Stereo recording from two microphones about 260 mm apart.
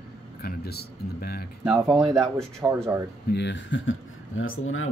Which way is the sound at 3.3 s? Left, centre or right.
Left.